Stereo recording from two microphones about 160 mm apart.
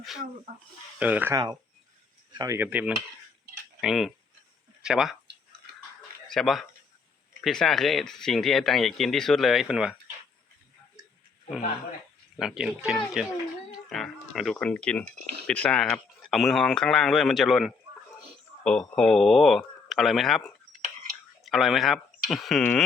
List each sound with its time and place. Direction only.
0.9 s cutlery: 10° right (ahead or behind)
1.3 s speech: 20° right (ahead or behind)
2.4 s cutlery: 15° right (ahead or behind)
3.8 s speech: 5° right (ahead or behind)
6.2 s speech: centre (ahead or behind)
12.4 s speech: centre (ahead or behind)